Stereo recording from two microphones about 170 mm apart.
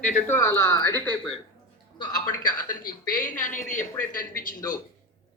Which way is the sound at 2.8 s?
50° left (ahead or behind).